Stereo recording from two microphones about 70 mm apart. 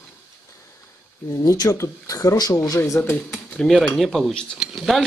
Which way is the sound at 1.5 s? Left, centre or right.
Left.